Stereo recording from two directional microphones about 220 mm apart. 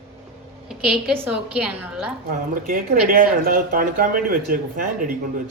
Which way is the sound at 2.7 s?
40° right (ahead or behind).